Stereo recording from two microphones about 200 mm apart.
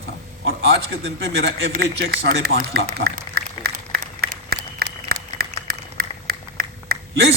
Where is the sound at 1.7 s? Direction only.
50° right (ahead or behind).